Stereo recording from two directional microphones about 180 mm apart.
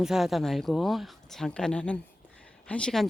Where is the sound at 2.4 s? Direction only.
5° left (ahead or behind).